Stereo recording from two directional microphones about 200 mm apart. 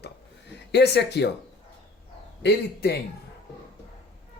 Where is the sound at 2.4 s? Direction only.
55° left (ahead or behind).